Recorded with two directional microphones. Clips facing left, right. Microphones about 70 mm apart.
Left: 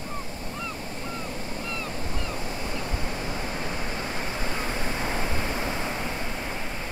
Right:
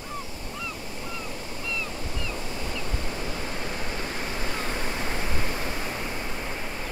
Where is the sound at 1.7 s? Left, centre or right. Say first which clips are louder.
Right 2 dB; left.